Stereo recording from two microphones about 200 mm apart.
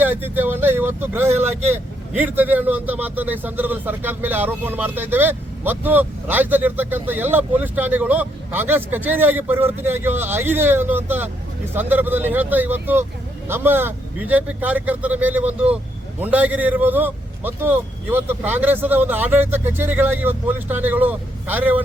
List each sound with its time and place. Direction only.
0.0 s speech: 10° right (ahead or behind)